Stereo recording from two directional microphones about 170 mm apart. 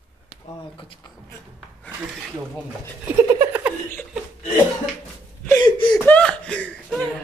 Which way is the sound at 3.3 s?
10° right (ahead or behind).